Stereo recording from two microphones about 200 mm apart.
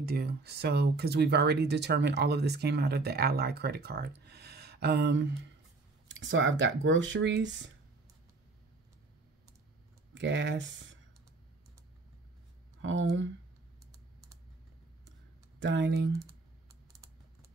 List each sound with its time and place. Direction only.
0.0 s speech: 50° right (ahead or behind)
10.1 s speech: 60° right (ahead or behind)
12.8 s speech: 70° right (ahead or behind)
15.6 s speech: 65° right (ahead or behind)
16.9 s typing: 15° right (ahead or behind)